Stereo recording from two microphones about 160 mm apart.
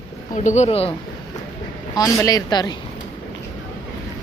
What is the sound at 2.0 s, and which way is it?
Speech, 20° left (ahead or behind).